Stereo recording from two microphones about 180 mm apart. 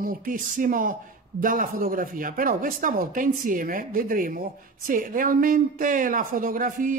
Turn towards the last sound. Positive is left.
turn(degrees=-50)  # may be behind; listen again after turning